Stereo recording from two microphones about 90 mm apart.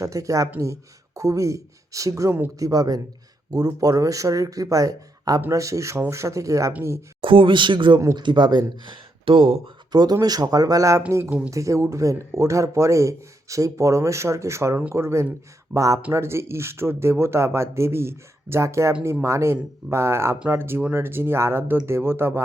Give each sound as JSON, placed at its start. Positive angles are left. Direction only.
{"t": 0.0, "sound": "speech", "side_deg": -35}
{"t": 7.2, "sound": "speech", "side_deg": -70}
{"t": 9.9, "sound": "speech", "side_deg": -50}
{"t": 11.3, "sound": "speech", "side_deg": -15}
{"t": 11.5, "sound": "speech", "side_deg": -35}